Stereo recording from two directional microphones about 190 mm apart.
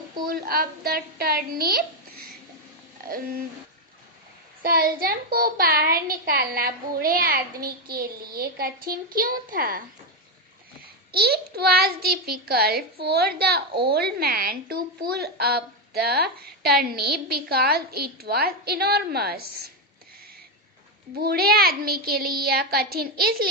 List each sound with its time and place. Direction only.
0.3 s a child's voice: 50° right (ahead or behind)
4.6 s a child's voice: 50° right (ahead or behind)
11.1 s a woman's voice: 55° right (ahead or behind)
21.2 s a child's voice: 55° right (ahead or behind)